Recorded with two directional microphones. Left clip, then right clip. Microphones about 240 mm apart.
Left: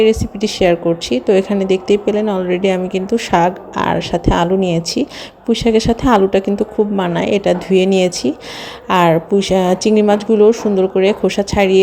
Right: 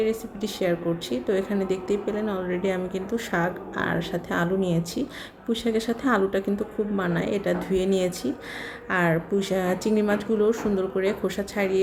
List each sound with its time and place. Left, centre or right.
0.0 s speech: left